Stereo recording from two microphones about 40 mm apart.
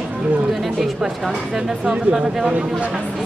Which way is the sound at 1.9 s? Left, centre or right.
Right.